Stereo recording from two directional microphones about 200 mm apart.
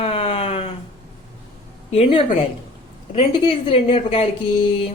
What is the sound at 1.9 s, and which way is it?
Speech, 30° left (ahead or behind).